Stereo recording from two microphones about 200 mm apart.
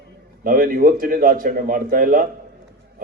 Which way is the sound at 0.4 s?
45° right (ahead or behind).